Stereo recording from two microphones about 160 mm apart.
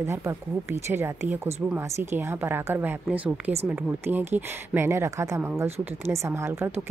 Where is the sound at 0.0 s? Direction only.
15° right (ahead or behind).